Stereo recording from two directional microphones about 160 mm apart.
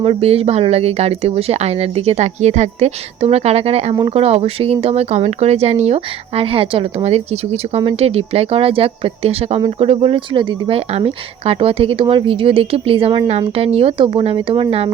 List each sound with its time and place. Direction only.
0.0 s speech: 35° right (ahead or behind)